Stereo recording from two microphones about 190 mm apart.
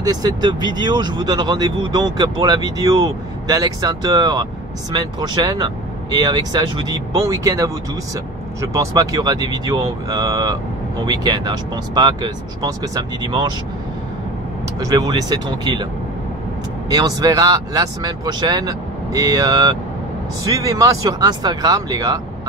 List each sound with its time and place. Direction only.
0.0 s speech: 20° right (ahead or behind)
14.8 s speech: 20° right (ahead or behind)
16.9 s speech: 20° right (ahead or behind)